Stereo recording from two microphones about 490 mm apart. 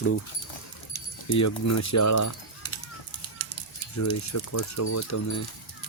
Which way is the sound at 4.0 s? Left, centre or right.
Left.